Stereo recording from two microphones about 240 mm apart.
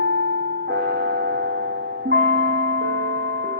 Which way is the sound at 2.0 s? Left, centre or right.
Right.